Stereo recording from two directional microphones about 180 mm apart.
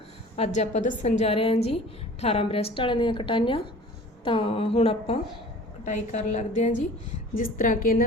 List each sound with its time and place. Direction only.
0.3 s a woman's voice: 40° left (ahead or behind)